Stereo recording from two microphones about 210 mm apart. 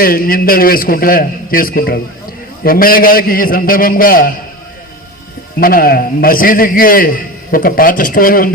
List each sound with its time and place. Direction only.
0.0 s a man's voice: 45° left (ahead or behind)
5.5 s a man's voice: 45° left (ahead or behind)